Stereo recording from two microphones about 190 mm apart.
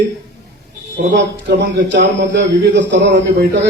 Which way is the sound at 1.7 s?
70° right (ahead or behind).